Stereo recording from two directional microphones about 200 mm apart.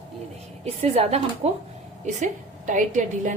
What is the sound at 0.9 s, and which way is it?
A woman's voice, 30° right (ahead or behind).